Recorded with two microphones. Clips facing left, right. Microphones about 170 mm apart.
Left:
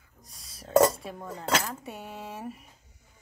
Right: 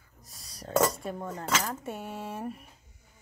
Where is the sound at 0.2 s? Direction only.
Centre (ahead or behind).